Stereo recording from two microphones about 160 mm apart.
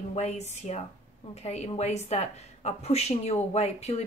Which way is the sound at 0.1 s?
45° left (ahead or behind).